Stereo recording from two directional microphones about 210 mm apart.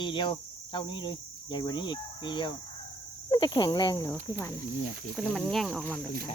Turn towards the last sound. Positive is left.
turn(degrees=0)  # may be behind; listen again after turning